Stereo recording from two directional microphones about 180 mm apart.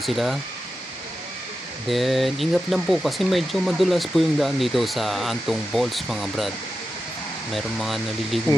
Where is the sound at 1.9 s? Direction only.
Centre (ahead or behind).